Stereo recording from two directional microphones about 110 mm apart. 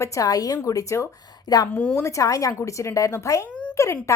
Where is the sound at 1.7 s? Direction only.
15° left (ahead or behind).